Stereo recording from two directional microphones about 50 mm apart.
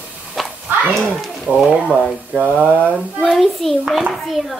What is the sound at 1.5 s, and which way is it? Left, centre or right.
Speech, right.